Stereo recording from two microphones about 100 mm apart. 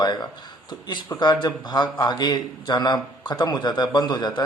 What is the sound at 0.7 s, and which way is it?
A man's voice, 45° left (ahead or behind).